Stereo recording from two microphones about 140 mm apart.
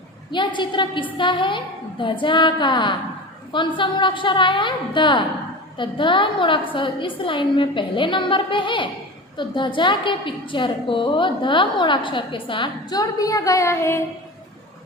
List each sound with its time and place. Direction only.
0.3 s a woman's voice: 35° left (ahead or behind)